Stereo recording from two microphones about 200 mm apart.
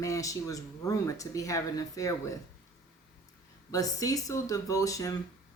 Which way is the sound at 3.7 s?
15° left (ahead or behind).